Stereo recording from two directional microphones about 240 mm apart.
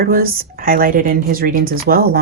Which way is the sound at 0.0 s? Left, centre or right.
Right.